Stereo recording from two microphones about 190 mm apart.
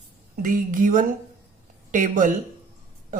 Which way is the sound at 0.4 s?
45° right (ahead or behind).